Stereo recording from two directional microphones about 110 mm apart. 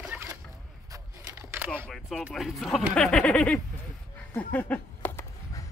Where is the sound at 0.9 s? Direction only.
25° right (ahead or behind).